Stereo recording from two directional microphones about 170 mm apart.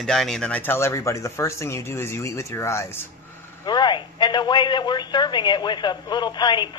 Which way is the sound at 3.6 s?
25° left (ahead or behind).